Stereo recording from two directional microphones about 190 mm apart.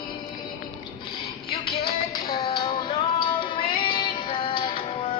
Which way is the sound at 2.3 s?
25° left (ahead or behind).